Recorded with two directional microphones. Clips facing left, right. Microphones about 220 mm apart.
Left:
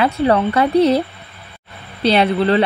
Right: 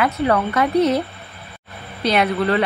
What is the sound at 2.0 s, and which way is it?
Speech, 30° left (ahead or behind).